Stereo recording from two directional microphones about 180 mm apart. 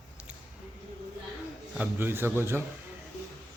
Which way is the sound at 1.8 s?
10° right (ahead or behind).